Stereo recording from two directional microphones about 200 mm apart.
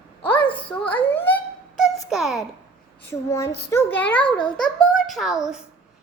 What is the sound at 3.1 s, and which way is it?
A child's voice, 15° left (ahead or behind).